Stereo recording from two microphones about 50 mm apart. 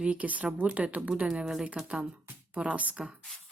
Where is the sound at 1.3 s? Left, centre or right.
Centre; by 3.1 s right.